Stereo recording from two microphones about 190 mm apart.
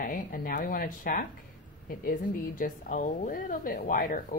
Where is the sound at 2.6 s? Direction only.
45° left (ahead or behind).